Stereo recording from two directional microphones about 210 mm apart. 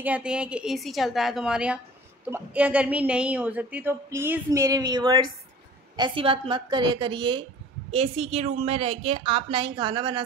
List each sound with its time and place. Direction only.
0.0 s a woman's voice: 5° right (ahead or behind); by 10.2 s 20° right (ahead or behind)